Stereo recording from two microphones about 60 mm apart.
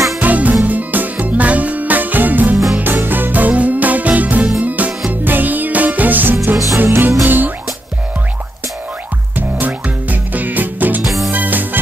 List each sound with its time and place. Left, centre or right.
0.2 s music: right
2.5 s music: centre
2.8 s music: right
9.6 s music: right
11.1 s music: centre
11.3 s music: right